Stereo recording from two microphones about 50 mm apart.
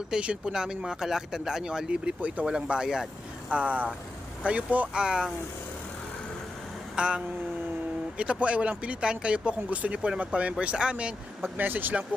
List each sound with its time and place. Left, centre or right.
0.1 s speech: centre
3.5 s speech: right
4.9 s speech: centre
6.9 s a sound: right
8.2 s speech: right
11.5 s speech: right